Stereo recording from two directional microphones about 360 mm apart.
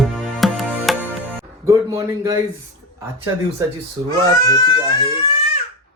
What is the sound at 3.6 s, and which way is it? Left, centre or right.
Speech, centre.